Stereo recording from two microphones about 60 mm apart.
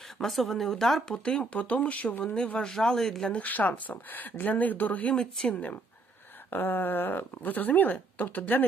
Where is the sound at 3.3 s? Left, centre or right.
Left.